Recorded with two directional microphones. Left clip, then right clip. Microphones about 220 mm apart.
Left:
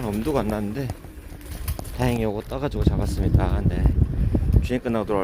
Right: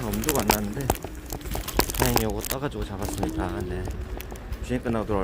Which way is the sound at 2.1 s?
25° left (ahead or behind).